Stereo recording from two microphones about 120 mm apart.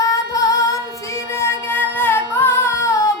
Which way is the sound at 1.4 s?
20° left (ahead or behind).